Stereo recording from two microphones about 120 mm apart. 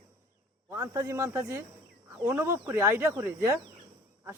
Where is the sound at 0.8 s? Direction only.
25° right (ahead or behind).